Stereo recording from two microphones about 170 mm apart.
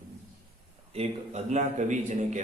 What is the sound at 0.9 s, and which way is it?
A man's voice, 40° right (ahead or behind).